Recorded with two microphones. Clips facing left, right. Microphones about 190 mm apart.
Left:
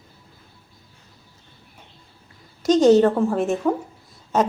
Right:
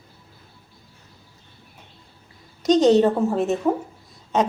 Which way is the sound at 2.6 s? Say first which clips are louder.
Left 1 dB; centre (ahead or behind).